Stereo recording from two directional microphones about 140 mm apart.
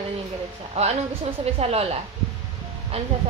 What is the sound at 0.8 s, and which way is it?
A woman's voice, 45° right (ahead or behind).